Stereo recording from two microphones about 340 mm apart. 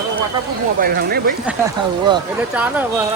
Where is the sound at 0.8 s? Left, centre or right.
Right.